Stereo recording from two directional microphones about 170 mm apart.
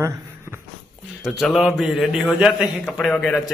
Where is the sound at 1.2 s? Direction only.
Centre (ahead or behind).